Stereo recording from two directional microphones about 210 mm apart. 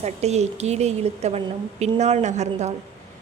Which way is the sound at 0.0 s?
30° right (ahead or behind).